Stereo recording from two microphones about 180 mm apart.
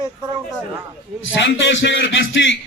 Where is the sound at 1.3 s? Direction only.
90° left.